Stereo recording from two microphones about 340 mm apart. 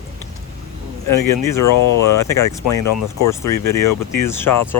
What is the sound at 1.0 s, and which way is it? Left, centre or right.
Speech, left.